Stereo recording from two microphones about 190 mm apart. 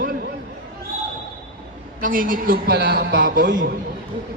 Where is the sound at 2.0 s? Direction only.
45° right (ahead or behind).